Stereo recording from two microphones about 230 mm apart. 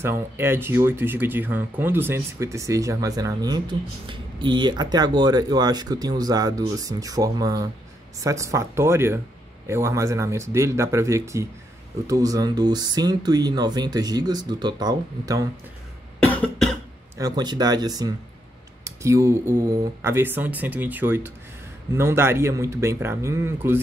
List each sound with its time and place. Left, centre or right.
0.0 s speech: centre
16.2 s cough: centre
17.2 s speech: centre